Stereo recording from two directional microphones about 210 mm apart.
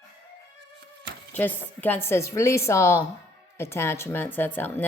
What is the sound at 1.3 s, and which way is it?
Speech, 10° left (ahead or behind).